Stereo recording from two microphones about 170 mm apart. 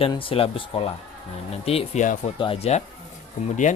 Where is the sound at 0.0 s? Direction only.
30° left (ahead or behind).